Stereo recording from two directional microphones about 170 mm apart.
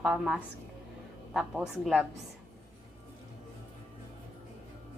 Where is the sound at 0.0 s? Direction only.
5° right (ahead or behind).